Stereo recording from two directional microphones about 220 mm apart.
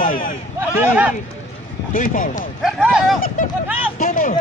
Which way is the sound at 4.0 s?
40° left (ahead or behind).